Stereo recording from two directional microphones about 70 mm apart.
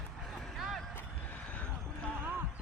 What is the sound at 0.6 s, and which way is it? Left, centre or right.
Vehicle, centre.